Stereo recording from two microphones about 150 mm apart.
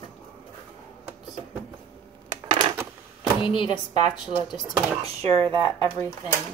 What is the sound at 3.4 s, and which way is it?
Speech, 35° left (ahead or behind).